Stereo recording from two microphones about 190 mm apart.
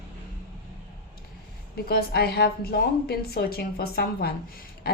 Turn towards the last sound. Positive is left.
turn(degrees=55)  # may be behind; listen again after turning